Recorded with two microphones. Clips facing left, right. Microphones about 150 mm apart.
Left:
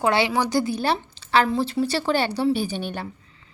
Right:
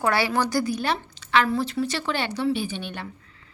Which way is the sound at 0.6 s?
30° left (ahead or behind).